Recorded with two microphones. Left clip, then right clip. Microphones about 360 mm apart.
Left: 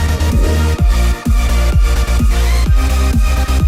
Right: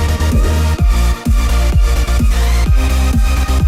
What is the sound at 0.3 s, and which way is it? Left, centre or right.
Music, centre.